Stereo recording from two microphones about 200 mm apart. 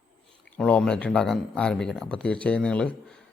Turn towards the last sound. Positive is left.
turn(degrees=5)  # may be behind; listen again after turning